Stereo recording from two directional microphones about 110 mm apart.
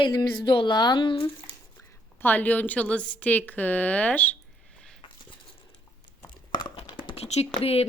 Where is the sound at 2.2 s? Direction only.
15° left (ahead or behind).